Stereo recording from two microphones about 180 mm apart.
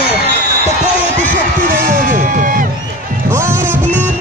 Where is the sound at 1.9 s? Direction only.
50° right (ahead or behind).